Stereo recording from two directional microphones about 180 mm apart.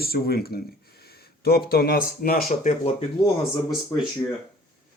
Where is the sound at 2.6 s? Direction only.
35° left (ahead or behind).